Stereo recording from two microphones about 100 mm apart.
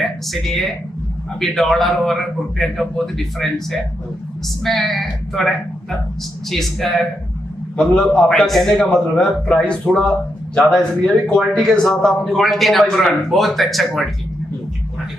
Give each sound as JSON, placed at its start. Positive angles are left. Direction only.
{"t": 0.0, "sound": "a man's voice", "side_deg": 0}